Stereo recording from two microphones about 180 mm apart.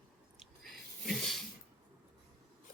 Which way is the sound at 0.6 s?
Centre (ahead or behind).